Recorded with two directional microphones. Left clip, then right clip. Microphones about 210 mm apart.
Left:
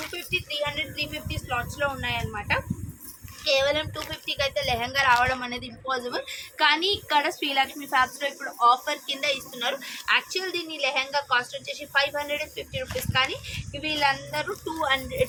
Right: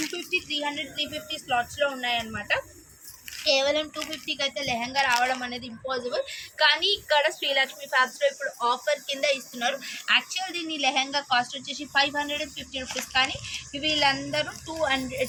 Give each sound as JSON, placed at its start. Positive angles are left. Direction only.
{"t": 0.3, "sound": "music", "side_deg": 50}
{"t": 3.4, "sound": "a woman's voice", "side_deg": 50}